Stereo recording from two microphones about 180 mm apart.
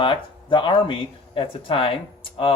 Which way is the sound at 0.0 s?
25° left (ahead or behind).